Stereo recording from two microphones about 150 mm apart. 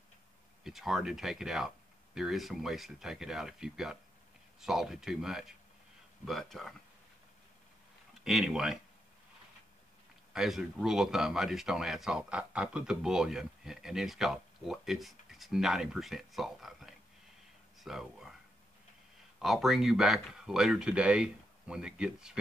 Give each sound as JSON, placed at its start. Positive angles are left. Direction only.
{"t": 0.7, "sound": "speech", "side_deg": 0}
{"t": 8.2, "sound": "speech", "side_deg": 0}
{"t": 10.3, "sound": "speech", "side_deg": 0}
{"t": 19.4, "sound": "speech", "side_deg": 0}